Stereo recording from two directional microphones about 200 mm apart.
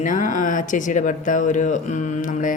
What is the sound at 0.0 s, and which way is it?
Speech, 40° left (ahead or behind).